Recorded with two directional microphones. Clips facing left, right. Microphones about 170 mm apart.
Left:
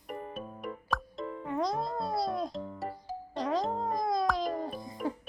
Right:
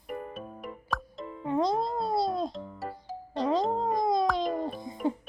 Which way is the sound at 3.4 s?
25° right (ahead or behind).